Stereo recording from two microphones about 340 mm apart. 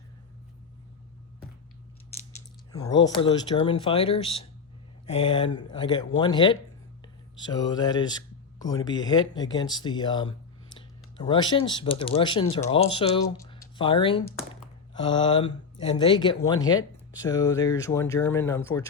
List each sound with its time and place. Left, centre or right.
2.7 s speech: centre